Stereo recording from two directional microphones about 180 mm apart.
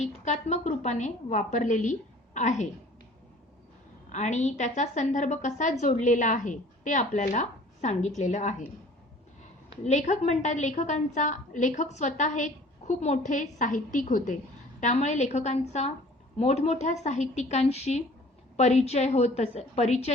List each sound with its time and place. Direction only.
0.0 s a woman's voice: 40° left (ahead or behind)
4.1 s a woman's voice: 40° left (ahead or behind)
9.8 s a woman's voice: 40° left (ahead or behind)